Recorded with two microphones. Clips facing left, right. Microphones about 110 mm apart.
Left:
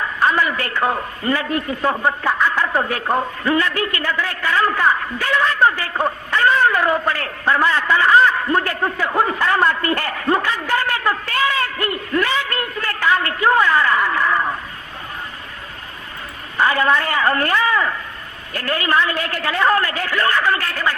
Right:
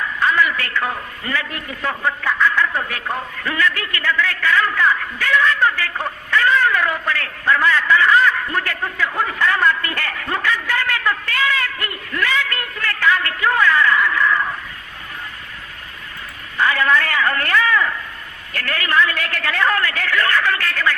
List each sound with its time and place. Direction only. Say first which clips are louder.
0.3 s a sound: right 1 dB; 35° left (ahead or behind)
0.8 s a man's voice: left 4 dB; 30° left (ahead or behind)
4.1 s a man's voice: right 5 dB; 30° left (ahead or behind)
9.9 s a man's voice: left 6 dB; 20° left (ahead or behind)
10.3 s a man's voice: even; 30° left (ahead or behind)
10.8 s a sound: left 2 dB; 20° left (ahead or behind)
11.0 s a man's voice: left 1 dB; 30° left (ahead or behind)
16.6 s a man's voice: left 1 dB; 30° left (ahead or behind)